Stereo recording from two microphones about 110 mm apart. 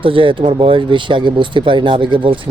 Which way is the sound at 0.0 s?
55° right (ahead or behind).